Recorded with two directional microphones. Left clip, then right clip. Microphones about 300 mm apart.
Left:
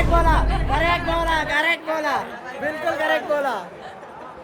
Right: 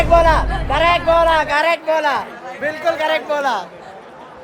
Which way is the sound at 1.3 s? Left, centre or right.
Centre.